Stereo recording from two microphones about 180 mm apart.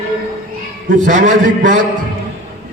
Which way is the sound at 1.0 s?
45° right (ahead or behind).